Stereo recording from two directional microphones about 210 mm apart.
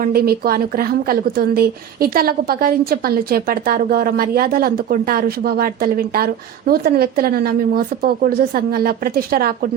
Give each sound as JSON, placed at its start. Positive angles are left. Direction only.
{"t": 0.0, "sound": "a woman's voice", "side_deg": -45}